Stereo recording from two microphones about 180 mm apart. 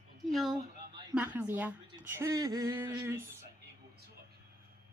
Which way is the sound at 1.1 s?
10° right (ahead or behind).